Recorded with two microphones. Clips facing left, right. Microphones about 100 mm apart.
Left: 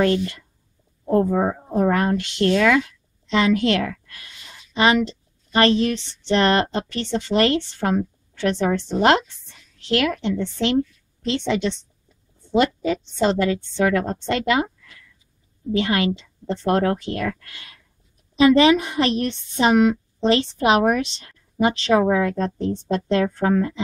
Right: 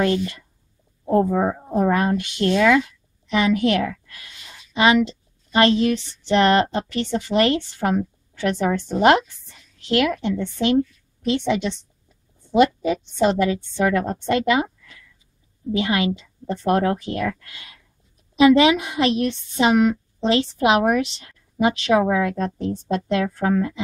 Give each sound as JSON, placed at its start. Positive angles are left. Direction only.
{"t": 0.0, "sound": "speech", "side_deg": -20}
{"t": 1.3, "sound": "a woman's voice", "side_deg": 5}
{"t": 1.7, "sound": "a woman's voice", "side_deg": -15}
{"t": 15.7, "sound": "a woman's voice", "side_deg": -15}
{"t": 20.2, "sound": "a woman's voice", "side_deg": -15}